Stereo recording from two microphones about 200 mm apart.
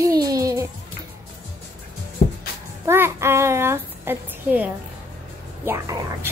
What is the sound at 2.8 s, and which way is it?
A child's voice, 10° right (ahead or behind).